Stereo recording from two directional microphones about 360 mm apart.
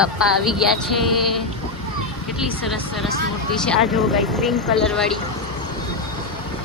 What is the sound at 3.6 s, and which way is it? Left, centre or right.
Speech, centre.